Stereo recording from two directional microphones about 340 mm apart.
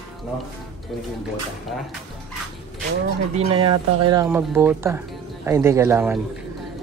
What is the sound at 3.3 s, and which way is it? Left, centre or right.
Speech, centre.